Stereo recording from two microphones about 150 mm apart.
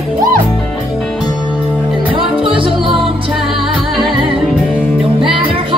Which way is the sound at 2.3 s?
35° right (ahead or behind).